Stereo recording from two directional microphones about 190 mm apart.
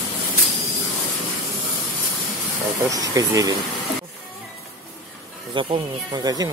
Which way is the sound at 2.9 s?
20° right (ahead or behind).